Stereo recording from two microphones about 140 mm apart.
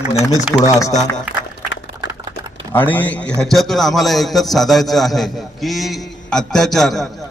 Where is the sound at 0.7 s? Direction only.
25° left (ahead or behind).